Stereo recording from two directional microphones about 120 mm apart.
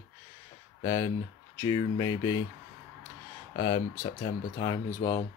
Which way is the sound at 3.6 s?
35° left (ahead or behind).